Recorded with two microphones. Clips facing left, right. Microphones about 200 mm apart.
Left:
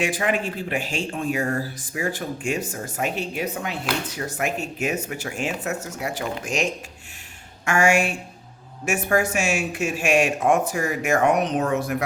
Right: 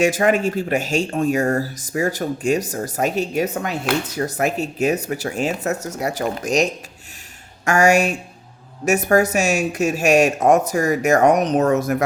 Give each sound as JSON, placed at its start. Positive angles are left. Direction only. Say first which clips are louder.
{"t": 0.0, "sound": "speech", "louder": "right 7 dB", "side_deg": -45}